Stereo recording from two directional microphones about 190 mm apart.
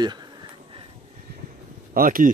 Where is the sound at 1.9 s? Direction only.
50° right (ahead or behind).